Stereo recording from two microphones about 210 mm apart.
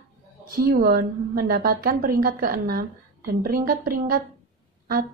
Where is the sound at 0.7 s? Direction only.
45° right (ahead or behind).